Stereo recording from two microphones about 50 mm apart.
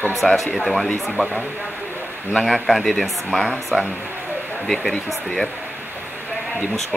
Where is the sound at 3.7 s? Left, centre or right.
Right.